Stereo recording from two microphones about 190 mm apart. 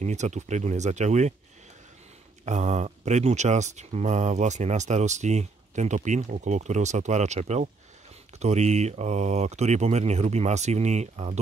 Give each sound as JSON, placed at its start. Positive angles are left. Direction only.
{"t": 0.0, "sound": "speech", "side_deg": -35}
{"t": 2.4, "sound": "speech", "side_deg": -35}